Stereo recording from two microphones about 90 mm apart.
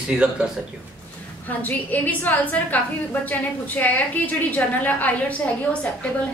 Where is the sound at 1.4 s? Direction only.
20° left (ahead or behind).